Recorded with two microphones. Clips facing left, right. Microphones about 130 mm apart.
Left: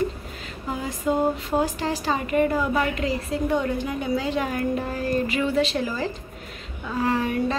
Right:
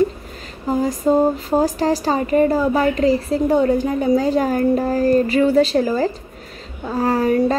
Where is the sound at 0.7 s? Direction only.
40° right (ahead or behind).